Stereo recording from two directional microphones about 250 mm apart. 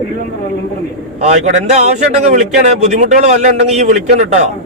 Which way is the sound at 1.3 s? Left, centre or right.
Right.